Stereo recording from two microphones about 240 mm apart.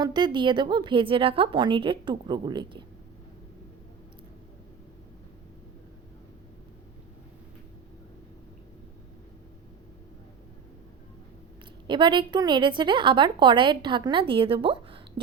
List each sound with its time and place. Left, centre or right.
0.0 s a woman's voice: centre
11.9 s a woman's voice: centre